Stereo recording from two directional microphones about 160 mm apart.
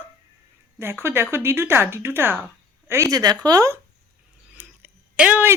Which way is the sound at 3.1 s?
25° right (ahead or behind).